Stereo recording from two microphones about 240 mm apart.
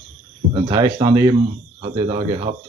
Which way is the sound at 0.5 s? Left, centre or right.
Centre.